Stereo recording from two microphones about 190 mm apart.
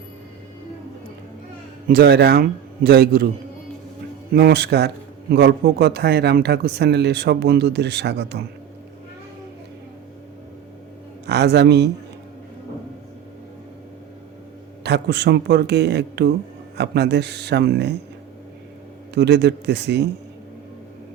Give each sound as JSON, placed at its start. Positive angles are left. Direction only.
{"t": 1.9, "sound": "a man's voice", "side_deg": -55}
{"t": 4.4, "sound": "speech", "side_deg": -60}
{"t": 11.3, "sound": "speech", "side_deg": -60}
{"t": 14.8, "sound": "speech", "side_deg": -60}
{"t": 19.1, "sound": "speech", "side_deg": -60}